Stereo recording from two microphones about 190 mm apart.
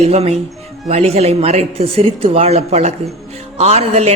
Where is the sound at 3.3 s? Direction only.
35° right (ahead or behind).